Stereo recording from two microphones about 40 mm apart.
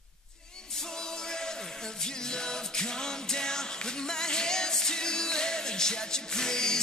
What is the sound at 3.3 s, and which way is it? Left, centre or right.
Music, centre.